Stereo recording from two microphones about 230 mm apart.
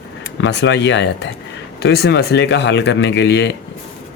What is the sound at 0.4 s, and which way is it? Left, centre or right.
Speech, left.